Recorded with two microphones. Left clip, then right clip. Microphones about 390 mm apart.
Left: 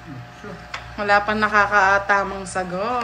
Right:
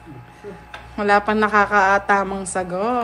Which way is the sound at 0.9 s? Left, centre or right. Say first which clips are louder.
Right 1 dB; centre.